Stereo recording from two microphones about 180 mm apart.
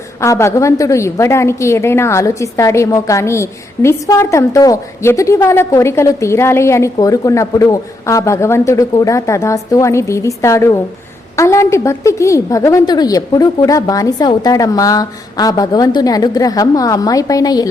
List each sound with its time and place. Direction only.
0.2 s a woman's voice: 15° left (ahead or behind)